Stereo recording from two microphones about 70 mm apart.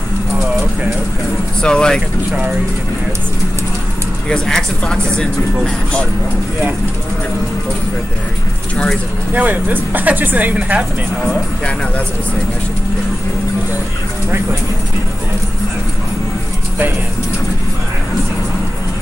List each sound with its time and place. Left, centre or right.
1.6 s speech: centre
4.3 s speech: centre
9.3 s speech: right